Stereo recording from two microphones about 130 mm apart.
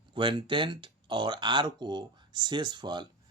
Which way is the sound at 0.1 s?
40° right (ahead or behind).